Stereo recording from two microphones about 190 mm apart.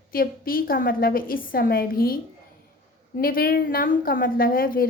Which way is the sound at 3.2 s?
50° left (ahead or behind).